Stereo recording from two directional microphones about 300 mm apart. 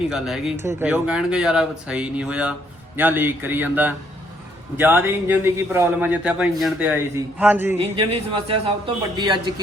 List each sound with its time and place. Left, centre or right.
0.1 s speech: centre
7.8 s speech: centre